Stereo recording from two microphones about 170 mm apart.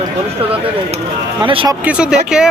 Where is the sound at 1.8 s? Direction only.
5° right (ahead or behind).